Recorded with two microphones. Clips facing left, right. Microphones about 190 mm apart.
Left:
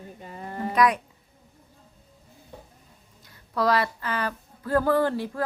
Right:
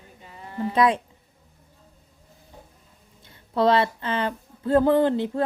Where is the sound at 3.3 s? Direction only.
25° right (ahead or behind).